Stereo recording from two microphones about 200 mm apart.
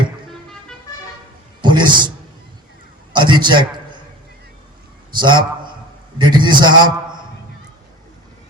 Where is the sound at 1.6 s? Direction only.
25° right (ahead or behind).